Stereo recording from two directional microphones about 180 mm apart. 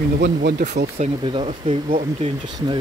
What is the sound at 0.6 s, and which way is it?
Speech, 45° right (ahead or behind).